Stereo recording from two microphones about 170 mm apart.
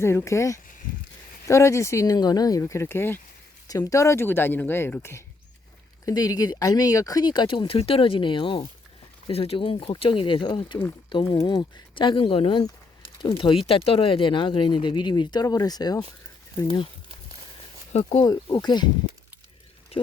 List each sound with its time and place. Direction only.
0.0 s speech: 15° left (ahead or behind)
18.2 s speech: 25° left (ahead or behind)